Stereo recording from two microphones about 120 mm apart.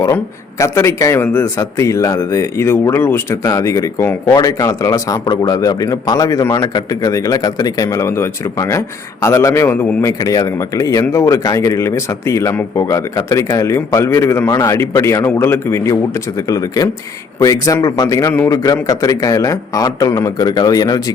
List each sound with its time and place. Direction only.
0.6 s a man's voice: 25° left (ahead or behind)